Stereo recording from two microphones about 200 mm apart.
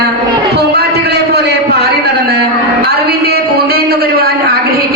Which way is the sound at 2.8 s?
55° right (ahead or behind).